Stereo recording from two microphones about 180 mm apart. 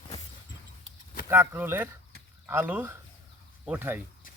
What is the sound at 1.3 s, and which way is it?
Speech, 10° right (ahead or behind).